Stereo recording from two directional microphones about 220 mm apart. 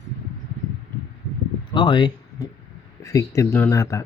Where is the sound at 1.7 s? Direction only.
20° left (ahead or behind).